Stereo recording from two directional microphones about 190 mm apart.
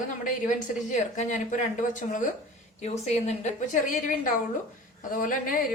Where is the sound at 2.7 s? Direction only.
35° left (ahead or behind).